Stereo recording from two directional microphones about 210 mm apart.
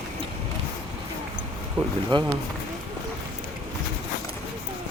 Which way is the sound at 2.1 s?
20° right (ahead or behind).